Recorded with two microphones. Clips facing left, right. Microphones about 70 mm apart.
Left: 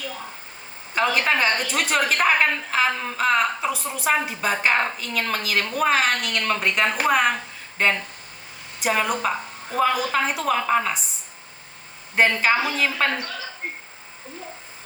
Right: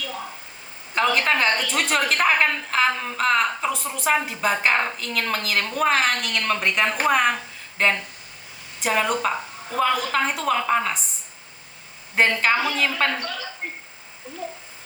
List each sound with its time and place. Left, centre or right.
0.9 s a woman's voice: centre
12.1 s a woman's voice: centre